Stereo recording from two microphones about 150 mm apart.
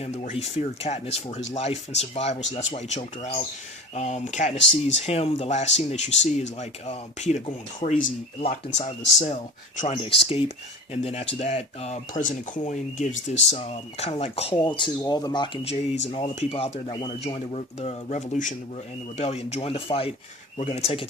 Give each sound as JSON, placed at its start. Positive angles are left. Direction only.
{"t": 0.0, "sound": "speech", "side_deg": 45}
{"t": 8.4, "sound": "speech", "side_deg": 40}
{"t": 12.2, "sound": "speech", "side_deg": 55}
{"t": 15.6, "sound": "speech", "side_deg": 40}